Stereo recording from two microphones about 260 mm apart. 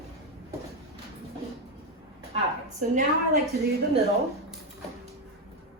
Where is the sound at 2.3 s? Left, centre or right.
Right.